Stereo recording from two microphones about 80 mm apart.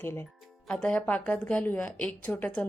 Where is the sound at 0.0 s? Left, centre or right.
Left.